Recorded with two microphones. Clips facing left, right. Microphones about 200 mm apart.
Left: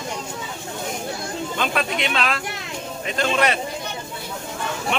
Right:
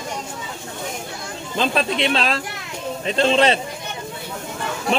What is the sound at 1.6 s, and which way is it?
Speech, 30° right (ahead or behind).